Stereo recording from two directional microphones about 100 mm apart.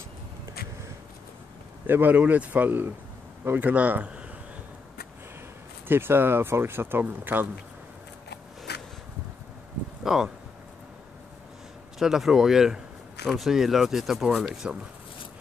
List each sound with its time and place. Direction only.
1.9 s speech: 20° right (ahead or behind)
5.9 s speech: 20° right (ahead or behind)
10.0 s speech: 5° right (ahead or behind)
12.0 s speech: 5° right (ahead or behind)